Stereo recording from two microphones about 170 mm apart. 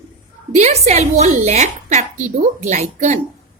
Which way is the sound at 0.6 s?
40° right (ahead or behind).